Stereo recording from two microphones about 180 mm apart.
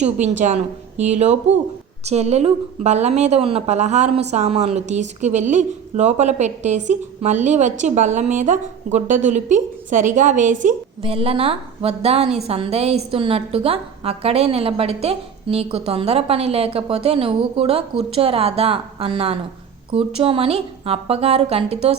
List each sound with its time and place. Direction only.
0.0 s a woman's voice: 40° right (ahead or behind)
11.0 s a woman's voice: 30° right (ahead or behind)